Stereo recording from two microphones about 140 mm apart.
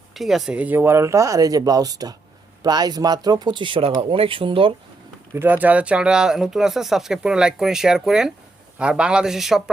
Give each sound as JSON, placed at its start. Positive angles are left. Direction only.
{"t": 0.1, "sound": "speech", "side_deg": 0}
{"t": 5.3, "sound": "speech", "side_deg": -15}